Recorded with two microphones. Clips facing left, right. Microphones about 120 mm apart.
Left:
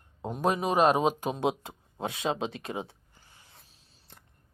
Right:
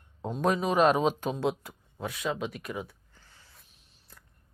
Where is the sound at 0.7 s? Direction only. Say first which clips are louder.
Even; 40° left (ahead or behind).